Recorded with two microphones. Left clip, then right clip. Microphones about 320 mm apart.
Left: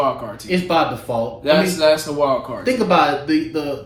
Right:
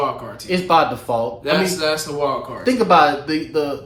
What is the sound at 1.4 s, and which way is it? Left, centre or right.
A woman's voice, centre.